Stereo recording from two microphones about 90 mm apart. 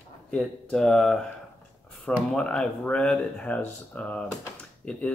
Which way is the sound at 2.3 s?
10° left (ahead or behind).